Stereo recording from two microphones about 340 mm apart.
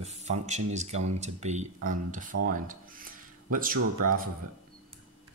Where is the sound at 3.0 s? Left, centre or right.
Right.